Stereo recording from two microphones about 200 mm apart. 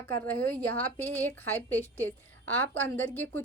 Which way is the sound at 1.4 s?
10° left (ahead or behind).